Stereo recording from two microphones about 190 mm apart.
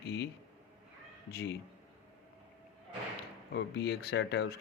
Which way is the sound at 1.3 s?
55° left (ahead or behind).